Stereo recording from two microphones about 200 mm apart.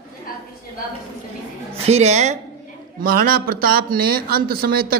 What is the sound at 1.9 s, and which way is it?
Speech, 35° right (ahead or behind).